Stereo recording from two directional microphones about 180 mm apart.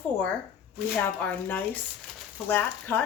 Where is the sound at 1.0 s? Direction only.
10° left (ahead or behind).